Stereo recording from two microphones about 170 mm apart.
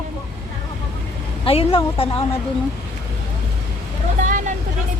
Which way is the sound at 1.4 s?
30° left (ahead or behind).